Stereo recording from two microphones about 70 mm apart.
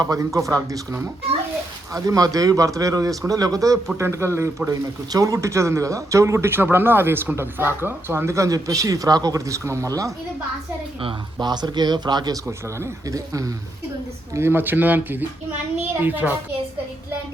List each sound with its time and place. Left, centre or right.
0.0 s a man's voice: right
1.9 s a man's voice: right
3.9 s speech: right
11.3 s speech: right
12.5 s speech: right
14.3 s speech: right